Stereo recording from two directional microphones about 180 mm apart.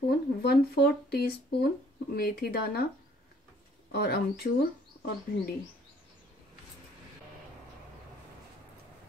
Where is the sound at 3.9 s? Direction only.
60° left (ahead or behind).